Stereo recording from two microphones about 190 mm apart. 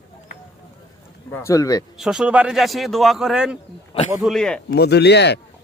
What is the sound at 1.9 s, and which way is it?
A man's voice, 5° right (ahead or behind).